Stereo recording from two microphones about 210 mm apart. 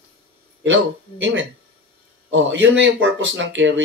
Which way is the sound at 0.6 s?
65° right (ahead or behind).